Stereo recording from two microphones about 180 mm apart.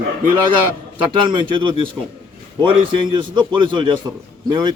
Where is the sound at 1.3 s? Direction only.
25° right (ahead or behind).